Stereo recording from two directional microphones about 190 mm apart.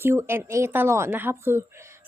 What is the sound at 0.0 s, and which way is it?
Speech, 10° right (ahead or behind).